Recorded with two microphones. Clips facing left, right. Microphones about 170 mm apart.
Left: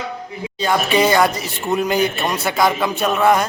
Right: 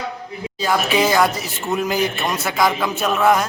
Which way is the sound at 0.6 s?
Centre (ahead or behind).